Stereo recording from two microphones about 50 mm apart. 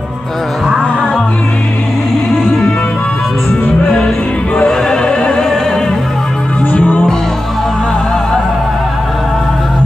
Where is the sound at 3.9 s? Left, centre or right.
Centre.